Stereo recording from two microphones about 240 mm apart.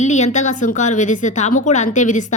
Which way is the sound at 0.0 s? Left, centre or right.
Left.